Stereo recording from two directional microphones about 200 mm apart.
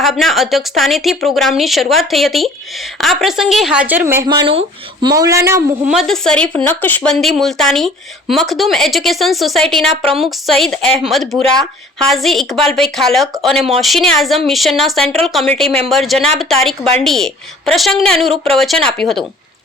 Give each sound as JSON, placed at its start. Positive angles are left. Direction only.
{"t": 0.0, "sound": "speech", "side_deg": 0}
{"t": 5.9, "sound": "speech", "side_deg": 0}
{"t": 13.6, "sound": "speech", "side_deg": -30}
{"t": 13.8, "sound": "speech", "side_deg": 0}
{"t": 15.0, "sound": "speech", "side_deg": -30}
{"t": 15.3, "sound": "speech", "side_deg": 0}